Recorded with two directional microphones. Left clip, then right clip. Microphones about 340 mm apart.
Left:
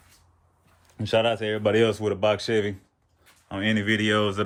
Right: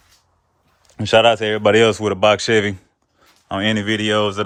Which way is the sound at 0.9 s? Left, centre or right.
Centre.